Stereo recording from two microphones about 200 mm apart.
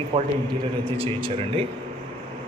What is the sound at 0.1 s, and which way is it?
Speech, 30° right (ahead or behind).